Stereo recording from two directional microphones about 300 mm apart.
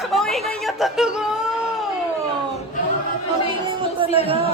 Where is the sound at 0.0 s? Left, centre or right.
Centre.